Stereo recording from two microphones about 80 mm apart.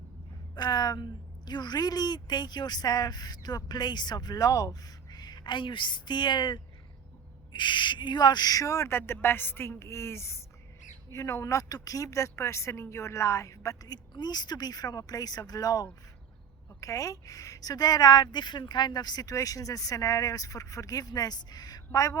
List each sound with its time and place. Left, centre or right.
0.5 s a woman's voice: left
8.9 s a woman's voice: left
13.8 s a woman's voice: left